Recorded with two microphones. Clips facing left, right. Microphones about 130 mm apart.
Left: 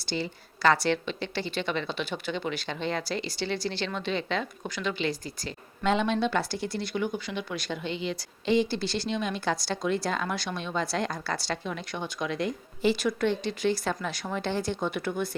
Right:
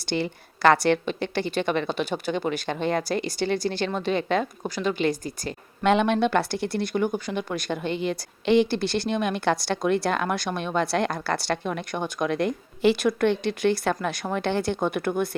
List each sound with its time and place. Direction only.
0.0 s a woman's voice: 60° right (ahead or behind)
5.9 s speech: 65° right (ahead or behind)